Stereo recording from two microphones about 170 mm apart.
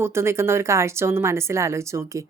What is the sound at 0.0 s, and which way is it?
Speech, 15° right (ahead or behind).